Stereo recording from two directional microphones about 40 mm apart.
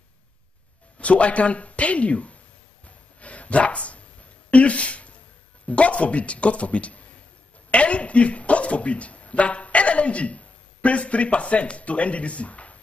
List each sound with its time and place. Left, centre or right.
0.9 s speech: left
3.2 s a sound: left
4.5 s speech: left